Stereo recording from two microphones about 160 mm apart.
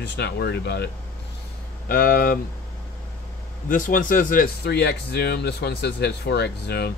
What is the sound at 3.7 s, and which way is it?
Speech, 55° left (ahead or behind).